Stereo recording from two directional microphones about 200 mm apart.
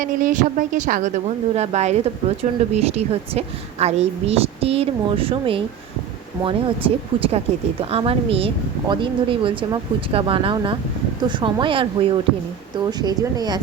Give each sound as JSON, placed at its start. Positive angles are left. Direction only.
{"t": 0.0, "sound": "a woman's voice", "side_deg": -40}